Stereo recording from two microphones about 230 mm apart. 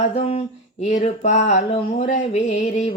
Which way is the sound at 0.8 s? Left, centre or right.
Left.